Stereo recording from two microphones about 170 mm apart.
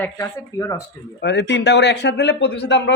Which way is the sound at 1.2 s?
90° left.